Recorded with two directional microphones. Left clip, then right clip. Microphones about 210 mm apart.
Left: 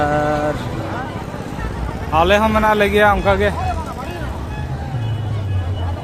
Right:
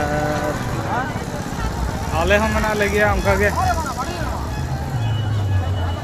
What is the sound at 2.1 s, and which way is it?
Speech, 35° left (ahead or behind).